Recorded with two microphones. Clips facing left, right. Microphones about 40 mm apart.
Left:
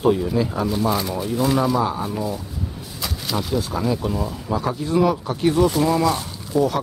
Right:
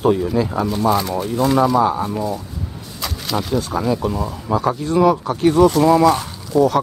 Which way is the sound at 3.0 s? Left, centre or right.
Centre.